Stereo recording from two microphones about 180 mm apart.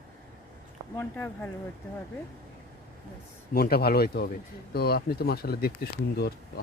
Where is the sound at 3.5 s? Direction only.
60° left (ahead or behind).